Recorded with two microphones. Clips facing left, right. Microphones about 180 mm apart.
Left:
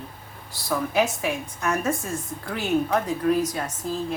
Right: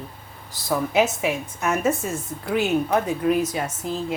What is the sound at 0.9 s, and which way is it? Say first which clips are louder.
Speech: right 3 dB; 20° right (ahead or behind).